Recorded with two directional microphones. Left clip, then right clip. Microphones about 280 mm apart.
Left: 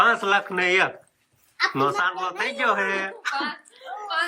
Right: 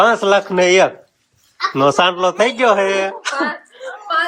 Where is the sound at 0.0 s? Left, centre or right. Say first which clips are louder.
Right 7 dB; centre.